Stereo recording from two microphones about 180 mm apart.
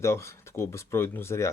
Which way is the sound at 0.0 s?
15° left (ahead or behind).